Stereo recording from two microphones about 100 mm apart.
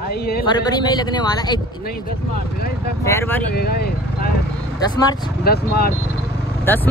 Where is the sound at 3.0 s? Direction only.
25° left (ahead or behind).